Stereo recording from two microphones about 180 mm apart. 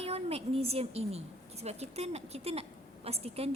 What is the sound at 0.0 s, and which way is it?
A woman's voice, 35° right (ahead or behind).